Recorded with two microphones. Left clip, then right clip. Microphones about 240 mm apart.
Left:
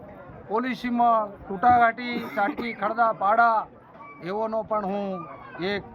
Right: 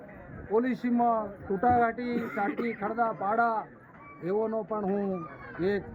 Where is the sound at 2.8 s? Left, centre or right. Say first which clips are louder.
Left 8 dB; centre.